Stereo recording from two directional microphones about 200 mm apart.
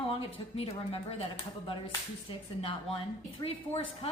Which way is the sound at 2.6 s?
30° left (ahead or behind).